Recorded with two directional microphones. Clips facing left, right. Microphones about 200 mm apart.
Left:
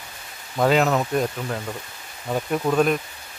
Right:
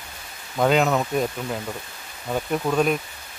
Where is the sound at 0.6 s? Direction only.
Centre (ahead or behind).